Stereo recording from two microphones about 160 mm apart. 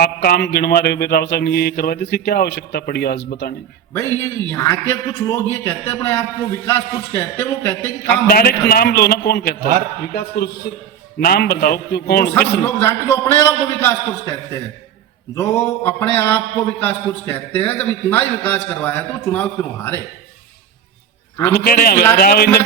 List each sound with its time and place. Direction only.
0.0 s mantra: 75° left (ahead or behind)
3.9 s a man's voice: 20° left (ahead or behind)
8.1 s mantra: 70° left (ahead or behind)
12.3 s a man's voice: 15° left (ahead or behind)
21.5 s mantra: 70° left (ahead or behind)